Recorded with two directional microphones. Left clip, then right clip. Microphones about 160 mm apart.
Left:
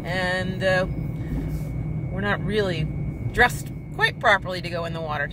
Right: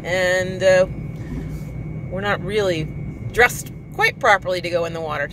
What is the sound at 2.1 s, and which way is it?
Speech, 55° right (ahead or behind).